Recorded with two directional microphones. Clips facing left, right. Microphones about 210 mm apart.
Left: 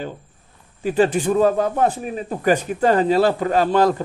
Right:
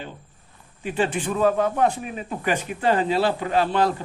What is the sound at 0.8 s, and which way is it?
A man's voice, 40° left (ahead or behind).